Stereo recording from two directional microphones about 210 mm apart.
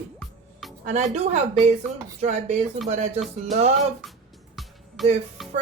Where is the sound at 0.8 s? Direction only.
30° right (ahead or behind).